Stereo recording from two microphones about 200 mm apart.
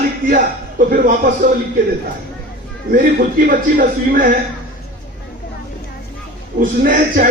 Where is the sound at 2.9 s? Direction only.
45° right (ahead or behind).